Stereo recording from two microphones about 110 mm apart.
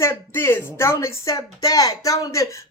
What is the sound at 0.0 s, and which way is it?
Speech, 20° left (ahead or behind).